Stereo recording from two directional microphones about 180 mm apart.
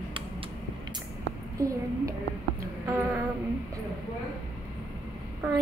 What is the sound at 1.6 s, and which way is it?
Speech, 20° right (ahead or behind).